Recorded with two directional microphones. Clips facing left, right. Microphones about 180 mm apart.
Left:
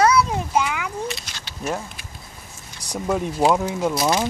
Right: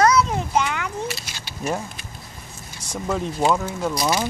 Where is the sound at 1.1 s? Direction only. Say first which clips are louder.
Even; 5° right (ahead or behind).